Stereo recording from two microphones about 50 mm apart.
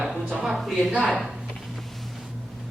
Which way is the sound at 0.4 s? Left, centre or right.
Centre.